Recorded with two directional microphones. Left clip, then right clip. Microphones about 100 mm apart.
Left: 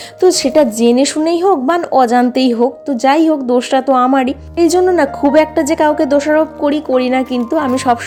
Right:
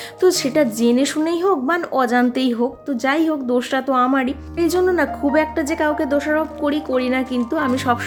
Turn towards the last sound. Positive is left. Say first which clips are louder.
# left 6 dB
turn(degrees=30)  # may be behind; listen again after turning